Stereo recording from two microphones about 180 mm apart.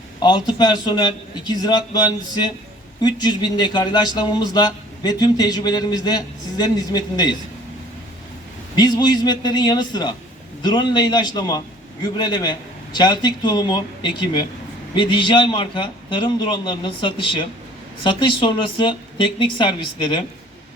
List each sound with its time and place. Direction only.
0.2 s speech: 25° left (ahead or behind)
8.7 s speech: 25° left (ahead or behind)